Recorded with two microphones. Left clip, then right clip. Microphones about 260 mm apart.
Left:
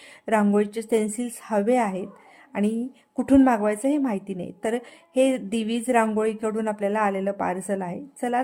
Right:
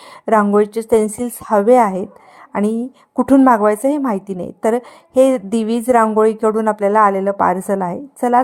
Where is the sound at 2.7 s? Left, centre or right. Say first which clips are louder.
Right 8 dB; centre.